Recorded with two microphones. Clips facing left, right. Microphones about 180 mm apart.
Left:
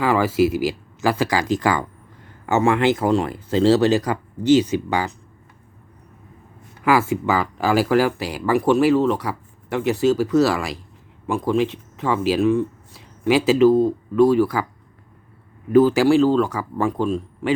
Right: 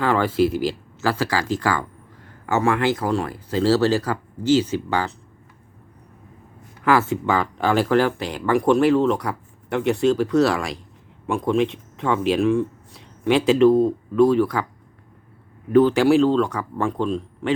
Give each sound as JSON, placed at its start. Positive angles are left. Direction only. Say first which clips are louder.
{"t": 0.0, "sound": "speech", "louder": "left 1 dB", "side_deg": 5}
{"t": 6.8, "sound": "speech", "louder": "left 1 dB", "side_deg": 10}
{"t": 15.7, "sound": "speech", "louder": "left 1 dB", "side_deg": 5}